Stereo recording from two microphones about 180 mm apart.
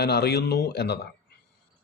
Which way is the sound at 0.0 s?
65° left (ahead or behind).